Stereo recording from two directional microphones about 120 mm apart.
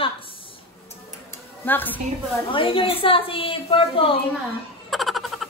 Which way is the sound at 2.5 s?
50° left (ahead or behind).